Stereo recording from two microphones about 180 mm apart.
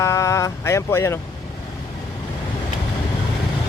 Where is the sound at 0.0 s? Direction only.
15° left (ahead or behind).